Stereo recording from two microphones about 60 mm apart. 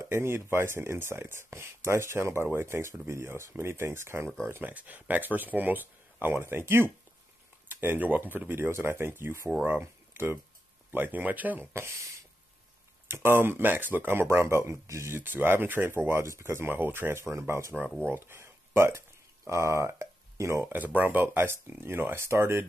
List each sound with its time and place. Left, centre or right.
0.1 s speech: right
4.6 s speech: right
11.7 s speech: right
13.1 s speech: right
15.2 s speech: right
16.1 s speech: right
20.6 s speech: right